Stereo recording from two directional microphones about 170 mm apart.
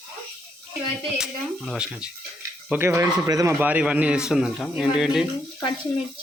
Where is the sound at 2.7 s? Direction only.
15° right (ahead or behind).